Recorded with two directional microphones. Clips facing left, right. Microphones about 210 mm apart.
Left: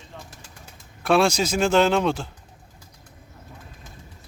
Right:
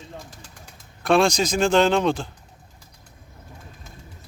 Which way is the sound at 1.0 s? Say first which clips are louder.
Right 1 dB; 5° left (ahead or behind).